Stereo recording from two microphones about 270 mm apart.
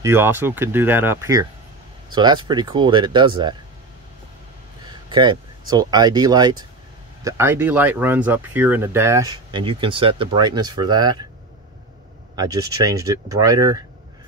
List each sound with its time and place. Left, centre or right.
0.0 s speech: centre
4.8 s speech: centre
12.4 s speech: centre